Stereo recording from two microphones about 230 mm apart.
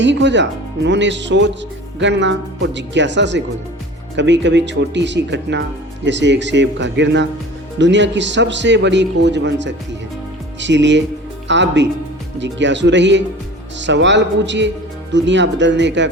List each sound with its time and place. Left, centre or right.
0.0 s a man's voice: right